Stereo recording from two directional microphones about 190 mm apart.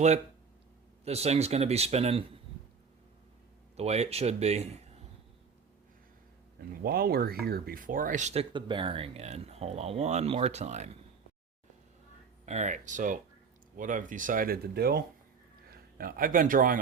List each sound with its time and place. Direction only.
1.0 s speech: 35° right (ahead or behind)
3.8 s speech: 35° right (ahead or behind)
6.8 s speech: 55° right (ahead or behind); by 10.9 s 35° right (ahead or behind)
12.5 s a man's voice: 40° right (ahead or behind)